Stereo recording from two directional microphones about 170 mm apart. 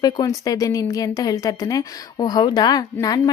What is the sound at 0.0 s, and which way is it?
A woman's voice, 20° left (ahead or behind).